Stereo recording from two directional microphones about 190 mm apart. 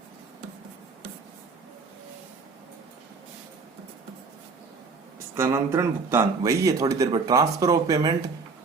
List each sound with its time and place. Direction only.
5.4 s speech: 15° right (ahead or behind)